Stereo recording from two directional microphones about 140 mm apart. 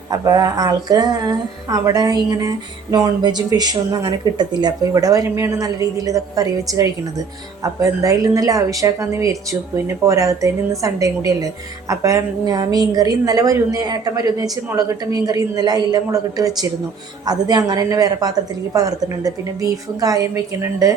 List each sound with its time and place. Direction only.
0.1 s a woman's voice: 25° right (ahead or behind)